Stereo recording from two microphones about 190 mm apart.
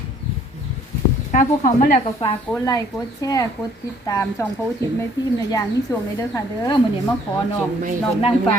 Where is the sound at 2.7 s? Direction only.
20° left (ahead or behind).